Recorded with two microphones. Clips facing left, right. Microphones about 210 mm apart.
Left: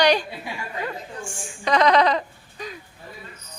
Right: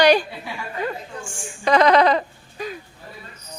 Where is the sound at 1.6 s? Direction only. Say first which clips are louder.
Right 3 dB; 50° right (ahead or behind).